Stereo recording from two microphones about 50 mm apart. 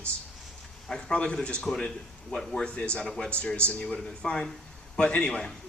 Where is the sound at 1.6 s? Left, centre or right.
Centre.